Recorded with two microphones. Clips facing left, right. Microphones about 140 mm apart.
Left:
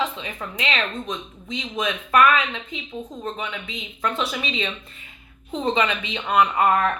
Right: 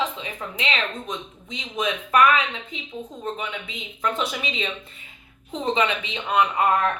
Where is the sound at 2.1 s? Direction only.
20° right (ahead or behind).